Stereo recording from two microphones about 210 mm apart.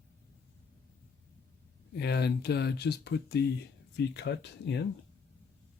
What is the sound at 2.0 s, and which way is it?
Speech, 50° left (ahead or behind).